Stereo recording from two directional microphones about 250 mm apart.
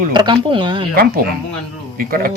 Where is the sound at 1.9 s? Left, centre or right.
Right.